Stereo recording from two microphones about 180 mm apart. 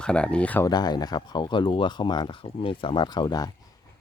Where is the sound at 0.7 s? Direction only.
20° left (ahead or behind).